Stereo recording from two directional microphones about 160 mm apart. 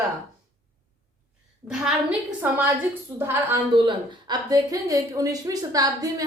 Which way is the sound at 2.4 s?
15° right (ahead or behind).